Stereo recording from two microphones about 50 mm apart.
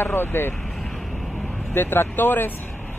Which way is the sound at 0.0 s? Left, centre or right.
Left.